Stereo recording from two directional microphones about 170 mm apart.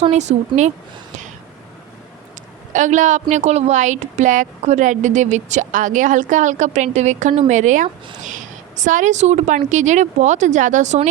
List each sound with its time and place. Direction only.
0.1 s a woman's voice: 40° right (ahead or behind)
2.7 s a woman's voice: 45° right (ahead or behind)